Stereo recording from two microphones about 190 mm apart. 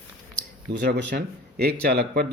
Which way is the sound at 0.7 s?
65° right (ahead or behind).